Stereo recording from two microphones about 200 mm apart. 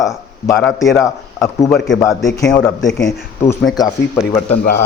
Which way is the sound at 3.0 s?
15° left (ahead or behind).